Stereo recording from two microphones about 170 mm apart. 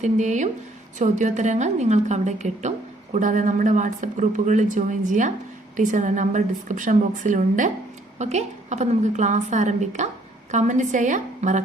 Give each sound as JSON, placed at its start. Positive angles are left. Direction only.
{"t": 0.0, "sound": "a woman's voice", "side_deg": -45}